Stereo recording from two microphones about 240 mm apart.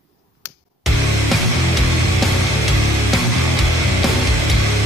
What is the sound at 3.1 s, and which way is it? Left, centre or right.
Music, centre.